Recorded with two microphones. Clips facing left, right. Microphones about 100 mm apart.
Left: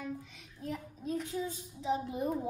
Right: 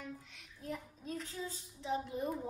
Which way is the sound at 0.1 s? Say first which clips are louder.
Left 7 dB; centre (ahead or behind).